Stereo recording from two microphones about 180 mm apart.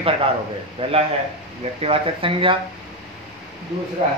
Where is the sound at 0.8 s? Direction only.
30° right (ahead or behind).